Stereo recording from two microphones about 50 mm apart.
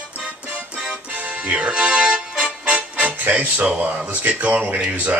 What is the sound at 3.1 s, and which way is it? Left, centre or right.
Speech, right.